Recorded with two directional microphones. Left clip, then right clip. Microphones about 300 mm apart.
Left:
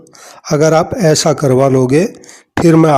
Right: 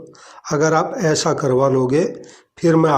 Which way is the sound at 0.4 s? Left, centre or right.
Left.